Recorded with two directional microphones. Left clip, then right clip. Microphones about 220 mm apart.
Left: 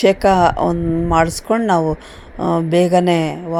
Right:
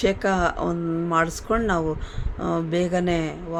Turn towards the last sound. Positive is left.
turn(degrees=25)  # may be behind; listen again after turning